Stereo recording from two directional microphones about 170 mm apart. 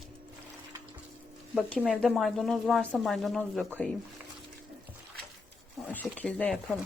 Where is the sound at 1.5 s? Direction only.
10° left (ahead or behind).